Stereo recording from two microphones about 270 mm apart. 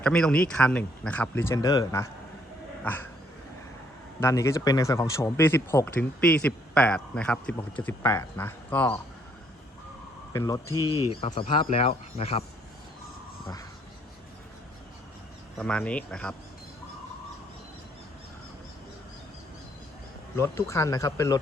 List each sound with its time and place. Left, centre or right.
0.0 s speech: centre
4.2 s speech: centre
10.3 s speech: centre
10.8 s speech: centre
11.1 s speech: left
15.5 s speech: centre
20.3 s speech: centre